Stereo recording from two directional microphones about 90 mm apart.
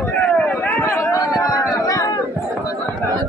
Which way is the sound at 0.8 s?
35° left (ahead or behind).